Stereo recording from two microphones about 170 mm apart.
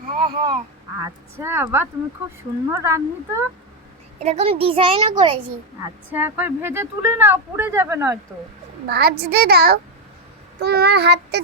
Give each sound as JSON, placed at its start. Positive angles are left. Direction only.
{"t": 0.1, "sound": "a sound", "side_deg": -30}
{"t": 0.9, "sound": "speech", "side_deg": -15}
{"t": 4.2, "sound": "a woman's voice", "side_deg": -40}
{"t": 5.8, "sound": "speech", "side_deg": -10}
{"t": 8.9, "sound": "a child's voice", "side_deg": -70}